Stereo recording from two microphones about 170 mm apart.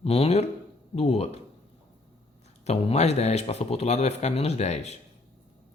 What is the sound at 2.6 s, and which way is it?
Speech, 40° left (ahead or behind).